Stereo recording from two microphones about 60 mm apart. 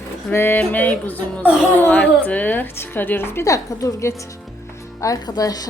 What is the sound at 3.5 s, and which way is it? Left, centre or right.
Speech, left.